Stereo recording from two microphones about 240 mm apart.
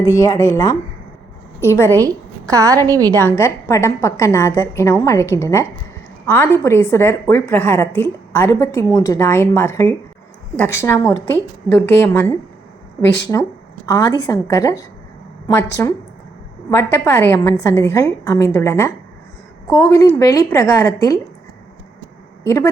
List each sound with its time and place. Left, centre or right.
0.0 s a woman's voice: centre
2.0 s a woman's voice: centre
3.2 s a woman's voice: centre
13.3 s a woman's voice: centre
22.4 s a woman's voice: centre